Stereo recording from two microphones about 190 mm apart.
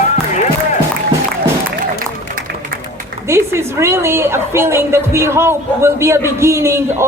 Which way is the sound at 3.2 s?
15° right (ahead or behind).